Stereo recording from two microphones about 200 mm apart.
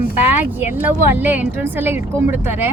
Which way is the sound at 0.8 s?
10° right (ahead or behind).